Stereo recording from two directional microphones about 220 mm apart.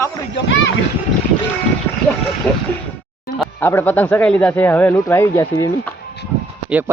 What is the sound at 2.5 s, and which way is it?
A man's voice, 5° left (ahead or behind).